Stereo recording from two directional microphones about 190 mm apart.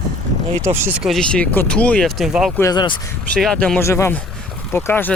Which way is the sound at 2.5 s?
20° left (ahead or behind).